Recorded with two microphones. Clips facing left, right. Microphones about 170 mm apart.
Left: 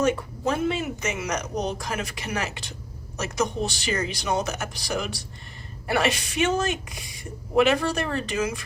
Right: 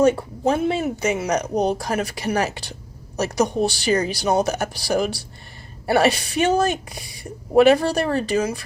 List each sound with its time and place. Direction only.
0.0 s a woman's voice: 30° right (ahead or behind)